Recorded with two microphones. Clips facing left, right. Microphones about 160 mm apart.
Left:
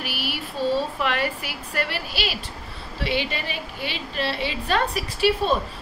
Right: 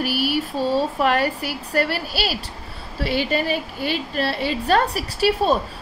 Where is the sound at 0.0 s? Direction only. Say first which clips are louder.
Right 9 dB; 40° right (ahead or behind).